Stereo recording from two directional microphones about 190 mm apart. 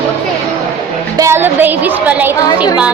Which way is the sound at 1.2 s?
10° right (ahead or behind).